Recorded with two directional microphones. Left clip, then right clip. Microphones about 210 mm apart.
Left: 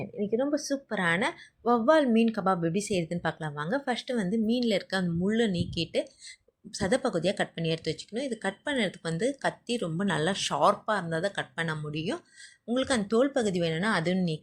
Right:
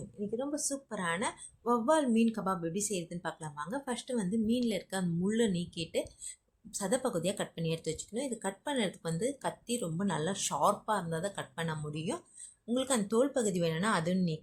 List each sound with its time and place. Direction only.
0.2 s speech: 20° left (ahead or behind)